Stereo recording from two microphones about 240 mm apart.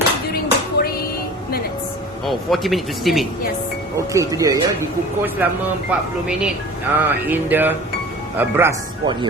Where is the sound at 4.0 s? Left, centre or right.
Centre.